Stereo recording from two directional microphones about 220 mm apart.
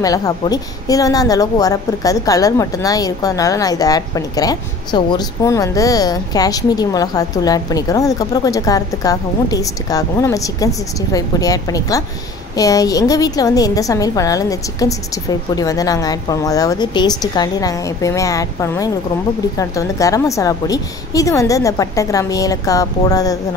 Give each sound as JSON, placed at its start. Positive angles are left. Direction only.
{"t": 0.0, "sound": "a woman's voice", "side_deg": 15}